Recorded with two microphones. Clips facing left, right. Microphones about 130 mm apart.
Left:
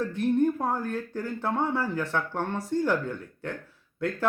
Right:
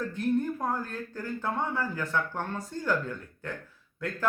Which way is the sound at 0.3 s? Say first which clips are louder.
Left 4 dB; 20° left (ahead or behind).